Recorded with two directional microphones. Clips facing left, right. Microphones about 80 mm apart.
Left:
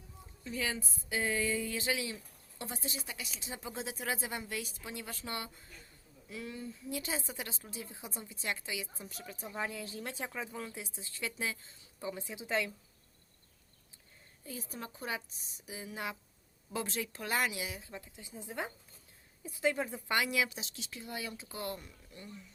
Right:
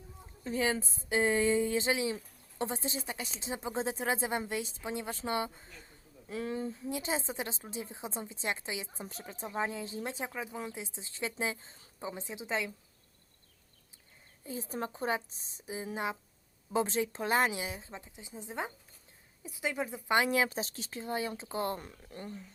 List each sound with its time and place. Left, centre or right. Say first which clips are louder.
0.4 s a woman's voice: right 6 dB; right
14.4 s a woman's voice: right 7 dB; right
20.1 s a woman's voice: right 5 dB; right
21.8 s speech: right 6 dB; right